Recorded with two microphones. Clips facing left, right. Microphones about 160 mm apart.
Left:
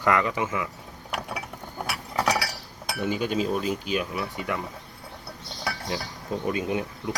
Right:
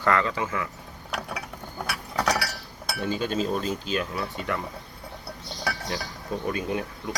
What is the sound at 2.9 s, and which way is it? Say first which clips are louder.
Speech: left 1 dB; 15° left (ahead or behind).